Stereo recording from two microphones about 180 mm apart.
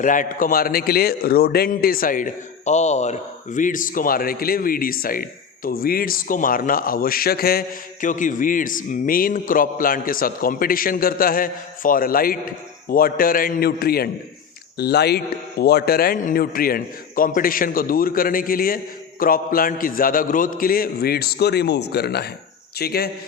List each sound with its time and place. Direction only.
0.0 s a man's voice: 45° left (ahead or behind)
8.0 s a man's voice: 45° left (ahead or behind)